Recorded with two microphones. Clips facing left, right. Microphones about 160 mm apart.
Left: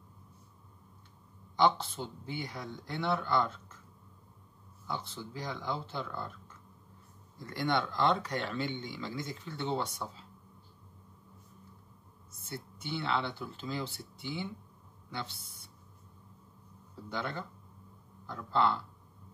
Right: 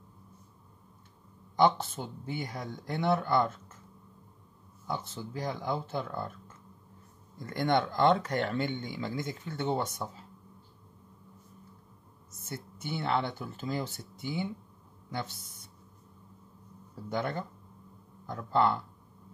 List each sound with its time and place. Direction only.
1.8 s speech: 45° right (ahead or behind)
5.0 s speech: 50° right (ahead or behind)
12.3 s speech: 45° right (ahead or behind)
17.1 s speech: 50° right (ahead or behind)